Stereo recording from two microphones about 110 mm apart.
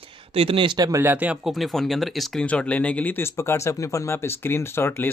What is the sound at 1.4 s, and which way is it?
Speech, centre (ahead or behind).